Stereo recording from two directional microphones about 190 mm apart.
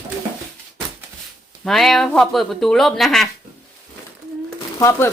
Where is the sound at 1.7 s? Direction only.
Centre (ahead or behind).